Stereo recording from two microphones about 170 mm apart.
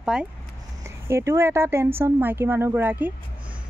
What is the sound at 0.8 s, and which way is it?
Speech, 15° right (ahead or behind).